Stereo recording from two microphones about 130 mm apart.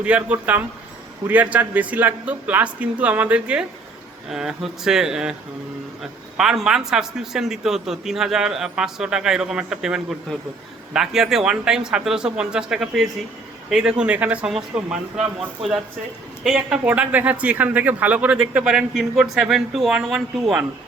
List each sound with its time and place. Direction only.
0.0 s a man's voice: 10° right (ahead or behind)